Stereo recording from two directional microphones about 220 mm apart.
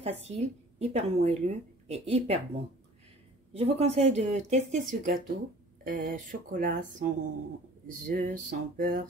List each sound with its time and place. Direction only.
0.0 s speech: 30° right (ahead or behind)
3.5 s speech: 30° right (ahead or behind)